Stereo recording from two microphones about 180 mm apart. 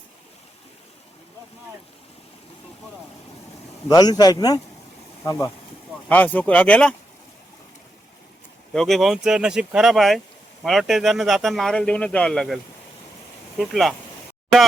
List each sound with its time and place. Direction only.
3.8 s speech: 20° left (ahead or behind)
8.7 s speech: centre (ahead or behind)
13.6 s speech: centre (ahead or behind)